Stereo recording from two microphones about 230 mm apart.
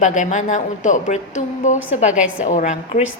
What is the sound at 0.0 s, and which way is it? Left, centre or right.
A woman's voice, left.